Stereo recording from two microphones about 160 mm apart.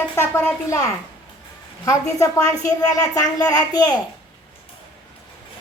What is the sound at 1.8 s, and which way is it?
Speech, 20° left (ahead or behind).